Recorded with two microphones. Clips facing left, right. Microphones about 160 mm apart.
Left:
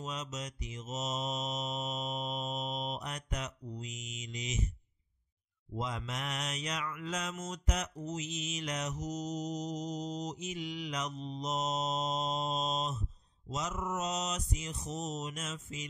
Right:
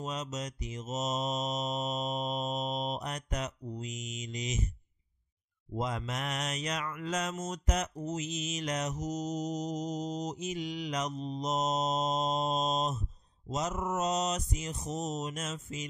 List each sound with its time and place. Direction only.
0.0 s mantra: 45° right (ahead or behind)
5.8 s mantra: 45° right (ahead or behind)